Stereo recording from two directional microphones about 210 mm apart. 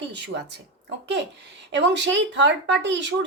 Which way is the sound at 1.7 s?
55° right (ahead or behind).